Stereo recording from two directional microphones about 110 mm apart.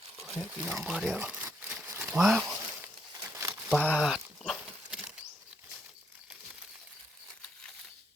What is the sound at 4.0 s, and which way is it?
Dog, 5° right (ahead or behind).